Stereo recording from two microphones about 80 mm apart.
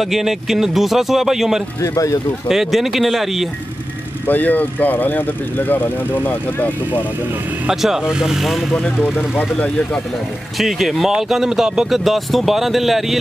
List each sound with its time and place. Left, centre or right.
0.0 s speech: centre
1.8 s speech: left
2.4 s speech: centre
4.3 s speech: left
7.6 s speech: centre
9.1 s speech: left
10.6 s speech: centre